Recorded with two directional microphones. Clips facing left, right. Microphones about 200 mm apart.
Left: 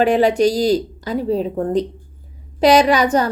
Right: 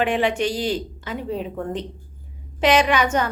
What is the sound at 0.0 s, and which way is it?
Speech, 40° left (ahead or behind).